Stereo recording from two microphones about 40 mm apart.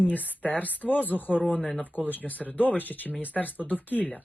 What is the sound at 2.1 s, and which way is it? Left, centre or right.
Speech, left.